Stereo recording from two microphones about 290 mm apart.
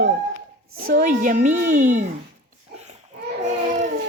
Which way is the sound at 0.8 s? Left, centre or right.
Right.